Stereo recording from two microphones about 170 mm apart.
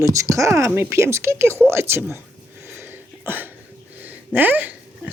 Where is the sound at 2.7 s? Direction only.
10° right (ahead or behind).